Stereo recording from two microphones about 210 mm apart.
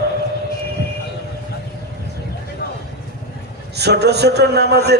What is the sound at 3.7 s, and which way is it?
A man's voice, 50° right (ahead or behind).